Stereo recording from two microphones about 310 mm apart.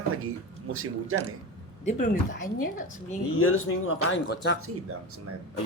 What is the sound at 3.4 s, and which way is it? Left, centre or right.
Speech, left.